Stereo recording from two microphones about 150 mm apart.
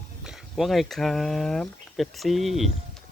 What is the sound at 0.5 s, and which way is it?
Speech, centre (ahead or behind).